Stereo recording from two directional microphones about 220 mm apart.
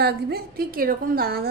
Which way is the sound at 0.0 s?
45° right (ahead or behind).